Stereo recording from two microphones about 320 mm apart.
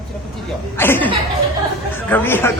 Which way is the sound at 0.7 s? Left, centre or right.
Centre.